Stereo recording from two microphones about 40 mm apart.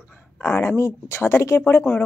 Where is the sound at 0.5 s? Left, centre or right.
Left.